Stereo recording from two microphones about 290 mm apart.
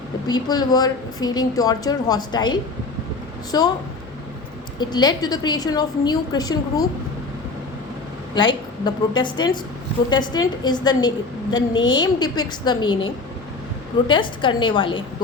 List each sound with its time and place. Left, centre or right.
0.3 s a woman's voice: centre
4.8 s a woman's voice: centre
8.4 s a woman's voice: centre
14.1 s a woman's voice: centre